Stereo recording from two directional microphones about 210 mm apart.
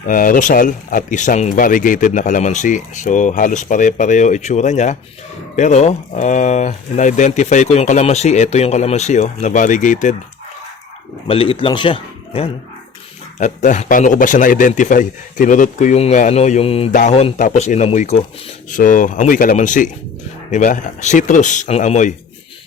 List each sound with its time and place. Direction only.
0.1 s speech: 40° left (ahead or behind)
11.3 s a man's voice: 25° left (ahead or behind)